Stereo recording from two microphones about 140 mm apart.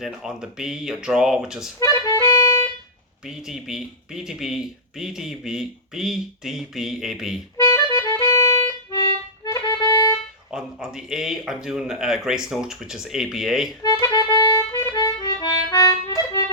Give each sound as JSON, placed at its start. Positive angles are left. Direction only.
{"t": 0.0, "sound": "speech", "side_deg": -5}
{"t": 1.8, "sound": "music", "side_deg": 25}
{"t": 3.2, "sound": "speech", "side_deg": -5}
{"t": 7.5, "sound": "music", "side_deg": 25}
{"t": 10.5, "sound": "speech", "side_deg": -5}
{"t": 13.8, "sound": "accordion", "side_deg": 25}
{"t": 14.8, "sound": "harmonica", "side_deg": 25}